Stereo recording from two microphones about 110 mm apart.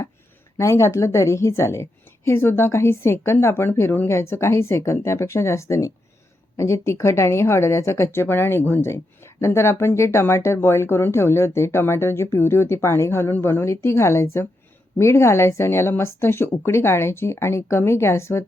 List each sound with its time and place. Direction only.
0.5 s a woman's voice: 25° left (ahead or behind)